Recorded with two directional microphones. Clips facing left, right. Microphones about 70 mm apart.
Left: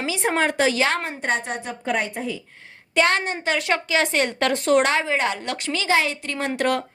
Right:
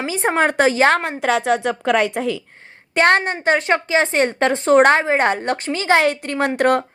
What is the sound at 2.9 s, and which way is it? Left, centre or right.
Speech, right.